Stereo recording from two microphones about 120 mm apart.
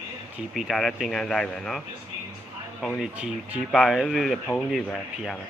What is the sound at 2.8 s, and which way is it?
Speech, centre (ahead or behind).